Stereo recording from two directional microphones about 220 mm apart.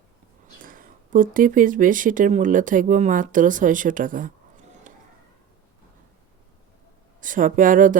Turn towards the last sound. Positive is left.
turn(degrees=-35)  # may be behind; listen again after turning